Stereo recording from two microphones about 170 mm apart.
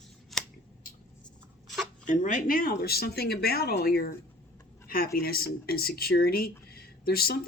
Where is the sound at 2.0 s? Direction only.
50° left (ahead or behind).